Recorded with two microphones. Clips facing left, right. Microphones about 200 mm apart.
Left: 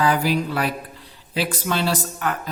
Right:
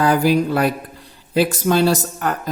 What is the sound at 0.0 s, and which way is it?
Speech, 45° right (ahead or behind).